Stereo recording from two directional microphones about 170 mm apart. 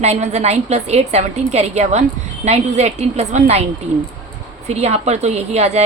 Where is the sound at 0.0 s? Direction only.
40° right (ahead or behind).